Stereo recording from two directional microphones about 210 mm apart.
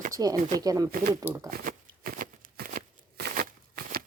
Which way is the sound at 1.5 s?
45° right (ahead or behind).